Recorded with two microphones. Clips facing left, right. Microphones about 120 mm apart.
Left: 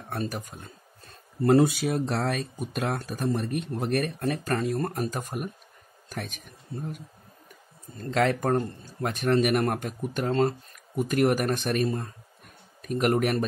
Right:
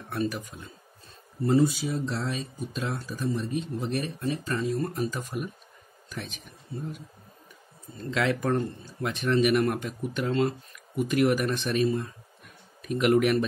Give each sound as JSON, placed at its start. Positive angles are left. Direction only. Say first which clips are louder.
{"t": 0.1, "sound": "speech", "louder": "right 2 dB", "side_deg": 40}
{"t": 1.4, "sound": "speech", "louder": "left 3 dB", "side_deg": 65}
{"t": 8.0, "sound": "speech", "louder": "left 2 dB", "side_deg": 45}